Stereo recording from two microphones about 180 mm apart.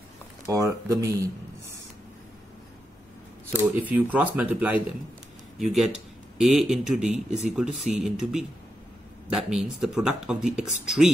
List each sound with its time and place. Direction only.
0.5 s speech: 15° right (ahead or behind)
3.9 s speech: 10° right (ahead or behind)